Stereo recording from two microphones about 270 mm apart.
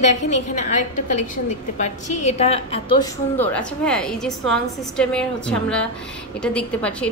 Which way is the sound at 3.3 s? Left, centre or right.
Centre.